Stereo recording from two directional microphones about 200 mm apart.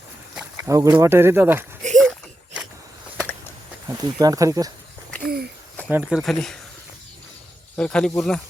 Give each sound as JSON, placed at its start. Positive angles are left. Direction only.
{"t": 0.3, "sound": "speech", "side_deg": -10}
{"t": 2.0, "sound": "a sound", "side_deg": 0}
{"t": 3.8, "sound": "speech", "side_deg": -20}
{"t": 5.2, "sound": "a sound", "side_deg": -50}
{"t": 5.9, "sound": "speech", "side_deg": -5}
{"t": 7.8, "sound": "speech", "side_deg": 5}